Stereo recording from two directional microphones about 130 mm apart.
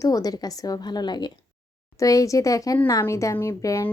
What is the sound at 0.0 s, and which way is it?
A woman's voice, 30° left (ahead or behind).